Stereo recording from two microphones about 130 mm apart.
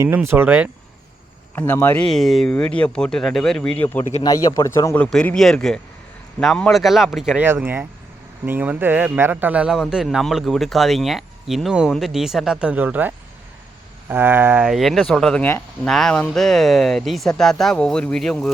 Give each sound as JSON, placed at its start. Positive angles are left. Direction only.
{"t": 0.3, "sound": "speech", "side_deg": -15}
{"t": 1.5, "sound": "speech", "side_deg": 15}
{"t": 4.2, "sound": "a man's voice", "side_deg": 25}
{"t": 4.9, "sound": "speech", "side_deg": 10}
{"t": 7.4, "sound": "speech", "side_deg": -15}
{"t": 14.6, "sound": "speech", "side_deg": 0}